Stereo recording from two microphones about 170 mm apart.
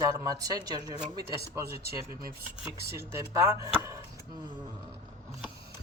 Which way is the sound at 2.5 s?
10° right (ahead or behind).